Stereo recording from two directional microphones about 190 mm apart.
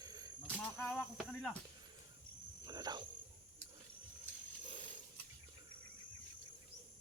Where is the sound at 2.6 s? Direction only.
20° right (ahead or behind).